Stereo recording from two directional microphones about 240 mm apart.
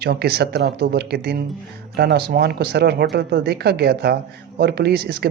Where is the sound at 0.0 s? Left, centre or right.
Right.